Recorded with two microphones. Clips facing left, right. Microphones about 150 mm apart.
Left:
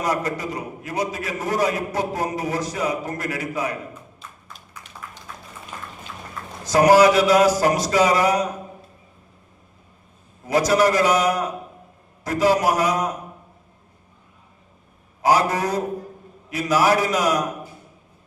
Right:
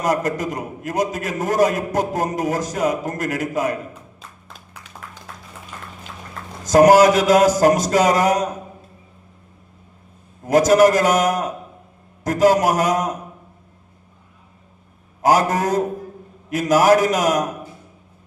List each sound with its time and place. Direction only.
0.0 s a man's voice: 45° right (ahead or behind)
6.7 s a man's voice: 45° right (ahead or behind)
10.4 s a man's voice: 45° right (ahead or behind)
15.2 s a man's voice: 45° right (ahead or behind)